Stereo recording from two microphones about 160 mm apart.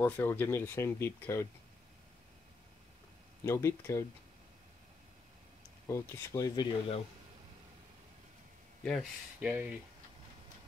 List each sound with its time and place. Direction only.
0.0 s speech: 15° left (ahead or behind)
3.4 s speech: 20° left (ahead or behind)
5.9 s speech: 20° left (ahead or behind)
9.4 s speech: 10° right (ahead or behind)